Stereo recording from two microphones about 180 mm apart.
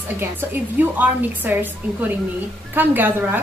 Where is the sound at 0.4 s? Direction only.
10° right (ahead or behind).